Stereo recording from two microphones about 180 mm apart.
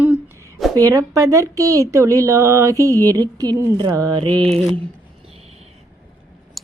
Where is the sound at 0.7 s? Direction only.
20° right (ahead or behind).